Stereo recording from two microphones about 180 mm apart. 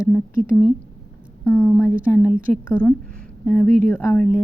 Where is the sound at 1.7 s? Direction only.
10° left (ahead or behind).